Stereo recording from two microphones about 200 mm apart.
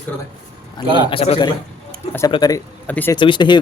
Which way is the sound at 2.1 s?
15° left (ahead or behind).